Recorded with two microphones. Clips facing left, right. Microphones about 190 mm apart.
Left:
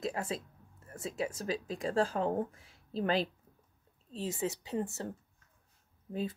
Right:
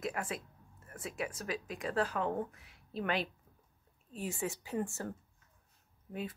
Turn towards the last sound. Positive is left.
turn(degrees=30)  # may be behind; listen again after turning